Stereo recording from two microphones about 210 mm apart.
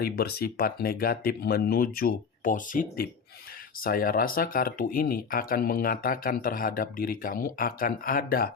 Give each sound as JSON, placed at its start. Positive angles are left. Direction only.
{"t": 0.0, "sound": "speech", "side_deg": 50}